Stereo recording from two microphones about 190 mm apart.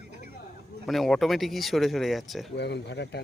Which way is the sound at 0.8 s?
Centre (ahead or behind).